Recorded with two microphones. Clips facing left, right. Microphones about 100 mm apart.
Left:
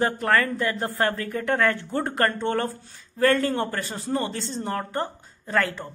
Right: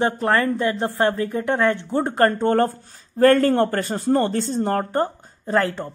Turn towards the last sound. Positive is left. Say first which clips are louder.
# right 4 dB
turn(degrees=-30)  # may be behind; listen again after turning